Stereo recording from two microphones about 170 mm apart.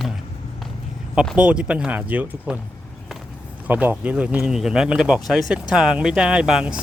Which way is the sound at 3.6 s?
10° right (ahead or behind).